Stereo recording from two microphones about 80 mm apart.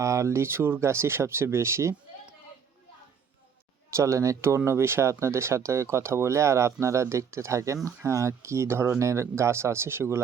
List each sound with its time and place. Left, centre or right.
0.0 s speech: right
3.9 s speech: right